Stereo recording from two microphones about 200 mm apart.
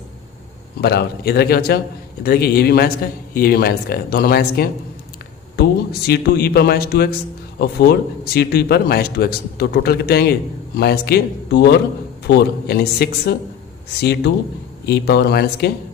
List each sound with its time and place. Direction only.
0.8 s a man's voice: 55° left (ahead or behind)
14.8 s speech: 55° left (ahead or behind)